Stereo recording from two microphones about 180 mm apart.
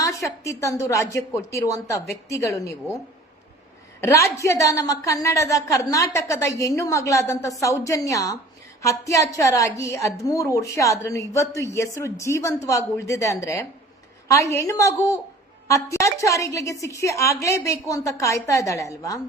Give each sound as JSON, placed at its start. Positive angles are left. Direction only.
{"t": 0.0, "sound": "a woman's voice", "side_deg": 15}
{"t": 4.0, "sound": "a woman's voice", "side_deg": 15}